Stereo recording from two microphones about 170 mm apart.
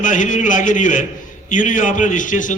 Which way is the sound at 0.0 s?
50° left (ahead or behind).